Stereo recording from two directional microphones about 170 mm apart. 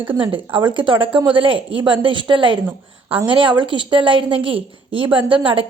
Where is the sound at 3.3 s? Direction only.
30° right (ahead or behind).